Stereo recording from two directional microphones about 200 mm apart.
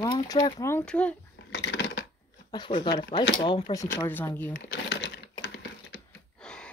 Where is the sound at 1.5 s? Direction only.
60° left (ahead or behind).